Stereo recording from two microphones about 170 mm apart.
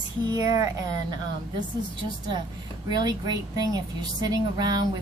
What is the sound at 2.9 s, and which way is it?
Speech, 25° right (ahead or behind).